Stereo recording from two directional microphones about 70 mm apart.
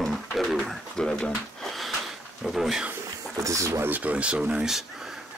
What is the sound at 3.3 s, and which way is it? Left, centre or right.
Speech, right.